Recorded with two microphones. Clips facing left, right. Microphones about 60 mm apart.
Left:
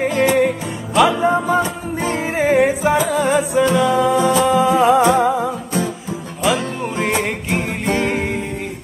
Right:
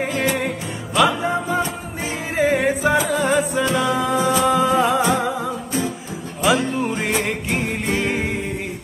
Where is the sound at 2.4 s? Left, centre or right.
Left.